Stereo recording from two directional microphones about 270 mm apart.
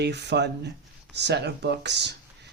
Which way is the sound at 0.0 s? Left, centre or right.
Right.